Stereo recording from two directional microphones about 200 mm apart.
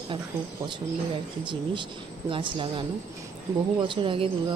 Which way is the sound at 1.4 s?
25° right (ahead or behind).